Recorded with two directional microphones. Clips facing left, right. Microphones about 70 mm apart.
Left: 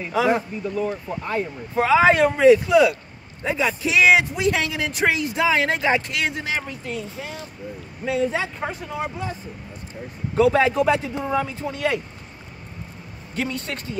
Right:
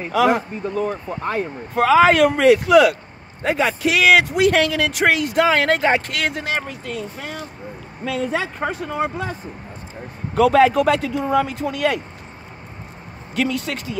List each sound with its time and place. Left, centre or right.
0.1 s speech: right
1.9 s speech: right
3.4 s speech: right
10.3 s speech: right
13.3 s speech: right